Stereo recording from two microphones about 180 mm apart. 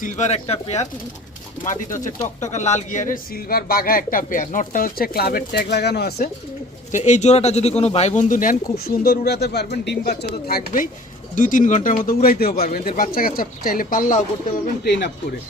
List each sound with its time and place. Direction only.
0.0 s speech: 40° left (ahead or behind)
2.5 s speech: 40° left (ahead or behind); by 6.3 s 60° left (ahead or behind)
6.9 s speech: 40° left (ahead or behind); by 10.8 s 60° left (ahead or behind)
11.3 s speech: 45° left (ahead or behind)
14.8 s speech: 70° left (ahead or behind)